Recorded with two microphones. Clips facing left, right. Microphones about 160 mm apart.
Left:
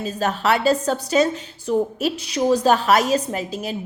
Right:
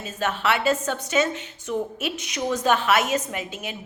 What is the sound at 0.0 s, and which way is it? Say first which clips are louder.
A woman's voice: left 4 dB; 35° left (ahead or behind).